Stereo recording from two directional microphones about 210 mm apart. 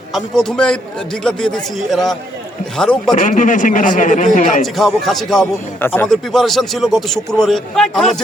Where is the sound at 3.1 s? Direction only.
35° left (ahead or behind).